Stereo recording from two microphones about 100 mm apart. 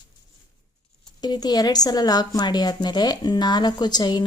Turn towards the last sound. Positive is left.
turn(degrees=45)  # may be behind; listen again after turning